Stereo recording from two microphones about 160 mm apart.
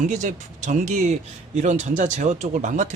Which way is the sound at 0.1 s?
50° right (ahead or behind).